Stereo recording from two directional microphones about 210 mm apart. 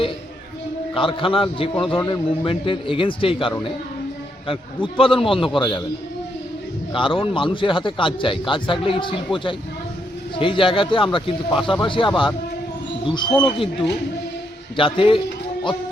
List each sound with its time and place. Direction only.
0.9 s a man's voice: 25° left (ahead or behind)
2.0 s a man's voice: 15° left (ahead or behind)
2.4 s a man's voice: 25° left (ahead or behind)
6.9 s a man's voice: 25° left (ahead or behind)
14.8 s a man's voice: 25° left (ahead or behind)